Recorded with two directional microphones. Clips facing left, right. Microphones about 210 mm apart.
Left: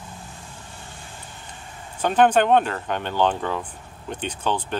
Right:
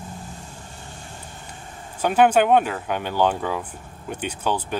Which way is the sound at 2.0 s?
10° right (ahead or behind).